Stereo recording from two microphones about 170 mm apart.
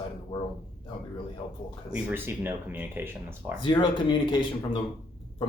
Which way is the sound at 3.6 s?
30° left (ahead or behind).